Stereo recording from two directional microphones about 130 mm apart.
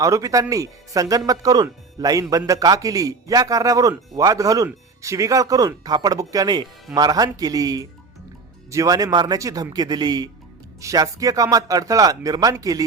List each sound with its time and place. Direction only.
0.0 s a man's voice: 25° right (ahead or behind)